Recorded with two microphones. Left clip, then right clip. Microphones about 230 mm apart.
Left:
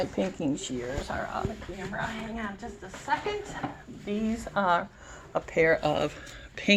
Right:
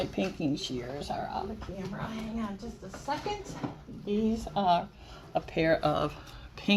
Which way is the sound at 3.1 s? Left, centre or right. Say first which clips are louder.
Left 5 dB; left.